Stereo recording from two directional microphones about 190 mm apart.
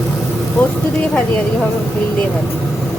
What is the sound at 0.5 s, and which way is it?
Speech, 5° left (ahead or behind).